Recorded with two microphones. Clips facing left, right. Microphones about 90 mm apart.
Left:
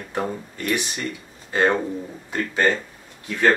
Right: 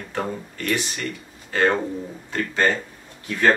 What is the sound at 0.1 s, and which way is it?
Speech, 15° left (ahead or behind).